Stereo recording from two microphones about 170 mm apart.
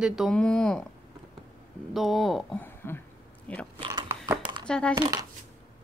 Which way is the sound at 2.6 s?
15° left (ahead or behind).